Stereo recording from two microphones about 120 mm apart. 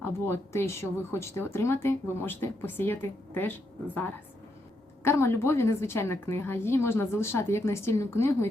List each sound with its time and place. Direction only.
0.0 s speech: 20° left (ahead or behind)
5.0 s speech: 20° left (ahead or behind)